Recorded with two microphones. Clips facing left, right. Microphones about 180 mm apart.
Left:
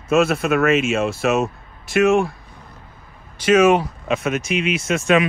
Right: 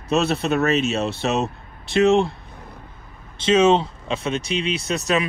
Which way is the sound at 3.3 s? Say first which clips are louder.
Left 2 dB; 25° right (ahead or behind).